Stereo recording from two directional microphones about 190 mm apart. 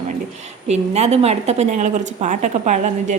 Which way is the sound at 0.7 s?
35° right (ahead or behind).